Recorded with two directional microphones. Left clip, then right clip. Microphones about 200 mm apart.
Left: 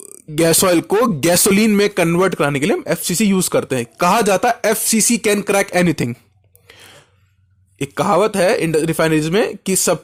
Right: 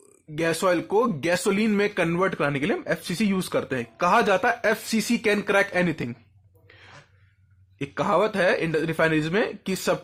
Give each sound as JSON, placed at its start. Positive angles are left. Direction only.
{"t": 0.3, "sound": "speech", "side_deg": 45}
{"t": 6.7, "sound": "a sound", "side_deg": 45}
{"t": 7.8, "sound": "speech", "side_deg": 45}